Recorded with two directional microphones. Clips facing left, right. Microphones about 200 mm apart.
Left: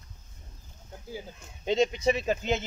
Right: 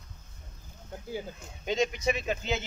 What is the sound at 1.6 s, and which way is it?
Speech, 25° left (ahead or behind).